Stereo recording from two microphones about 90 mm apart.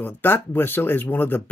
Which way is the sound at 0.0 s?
20° left (ahead or behind).